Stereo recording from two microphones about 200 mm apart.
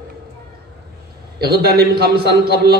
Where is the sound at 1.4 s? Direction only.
50° right (ahead or behind).